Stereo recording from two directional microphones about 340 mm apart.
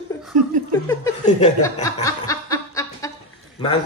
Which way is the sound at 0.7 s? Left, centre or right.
Centre.